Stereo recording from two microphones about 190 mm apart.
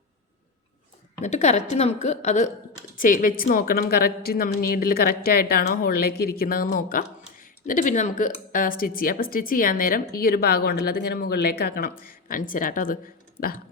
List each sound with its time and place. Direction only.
1.2 s a woman's voice: 35° left (ahead or behind)